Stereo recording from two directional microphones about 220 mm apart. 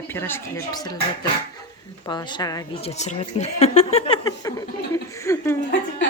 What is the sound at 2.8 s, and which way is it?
Speech, 30° left (ahead or behind).